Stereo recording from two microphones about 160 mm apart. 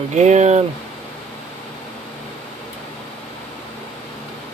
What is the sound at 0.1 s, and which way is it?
Speech, 45° right (ahead or behind).